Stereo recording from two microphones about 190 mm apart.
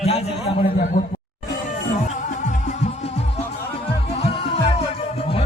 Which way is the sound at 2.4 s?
40° left (ahead or behind).